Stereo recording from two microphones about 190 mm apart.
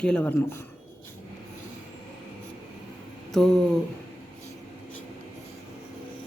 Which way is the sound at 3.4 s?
5° left (ahead or behind).